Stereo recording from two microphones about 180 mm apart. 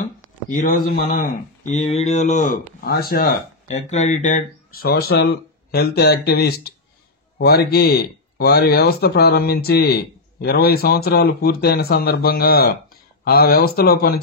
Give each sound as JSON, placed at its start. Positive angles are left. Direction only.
{"t": 0.5, "sound": "speech", "side_deg": 50}
{"t": 2.8, "sound": "speech", "side_deg": 60}
{"t": 3.6, "sound": "speech", "side_deg": 40}